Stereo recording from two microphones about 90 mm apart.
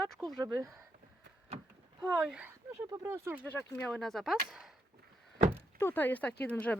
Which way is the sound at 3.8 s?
5° left (ahead or behind).